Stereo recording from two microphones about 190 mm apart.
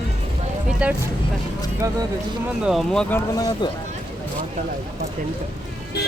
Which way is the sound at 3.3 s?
20° left (ahead or behind).